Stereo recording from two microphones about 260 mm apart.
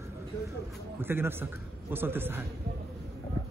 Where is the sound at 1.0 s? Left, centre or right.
Centre.